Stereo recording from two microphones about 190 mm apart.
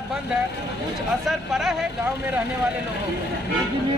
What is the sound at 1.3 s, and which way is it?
Speech, centre (ahead or behind).